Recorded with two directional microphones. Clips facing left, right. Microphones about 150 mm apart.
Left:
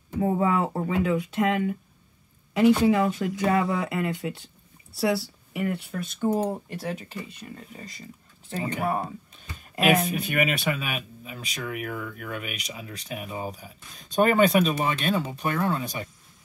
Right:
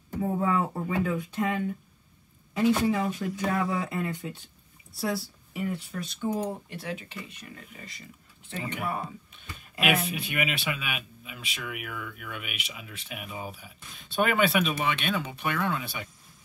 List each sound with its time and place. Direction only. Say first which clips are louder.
0.2 s speech: left 3 dB; 75° left (ahead or behind); by 16.1 s 40° left (ahead or behind)